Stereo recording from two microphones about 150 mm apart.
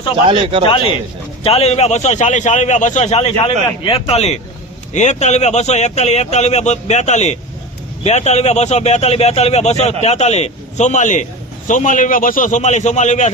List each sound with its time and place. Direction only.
0.3 s speech: 35° right (ahead or behind)
1.5 s a man's voice: 45° left (ahead or behind)